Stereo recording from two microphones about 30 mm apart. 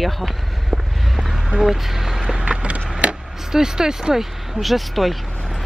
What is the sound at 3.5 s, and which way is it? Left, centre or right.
Speech, right.